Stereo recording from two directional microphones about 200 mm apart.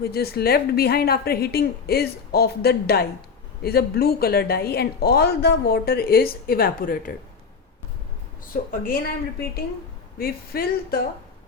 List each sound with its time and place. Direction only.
0.0 s a woman's voice: 50° left (ahead or behind)
8.7 s a woman's voice: 45° left (ahead or behind)